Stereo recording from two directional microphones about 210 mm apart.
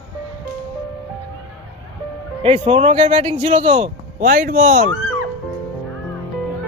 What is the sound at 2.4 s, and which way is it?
Speech, 30° right (ahead or behind).